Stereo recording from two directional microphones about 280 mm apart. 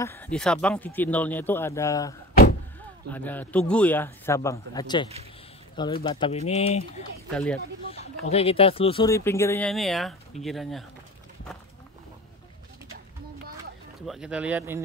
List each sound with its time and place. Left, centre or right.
0.0 s speech: centre
6.0 s speech: centre
7.3 s speech: centre
7.9 s speech: left; by 10.9 s centre
14.0 s speech: centre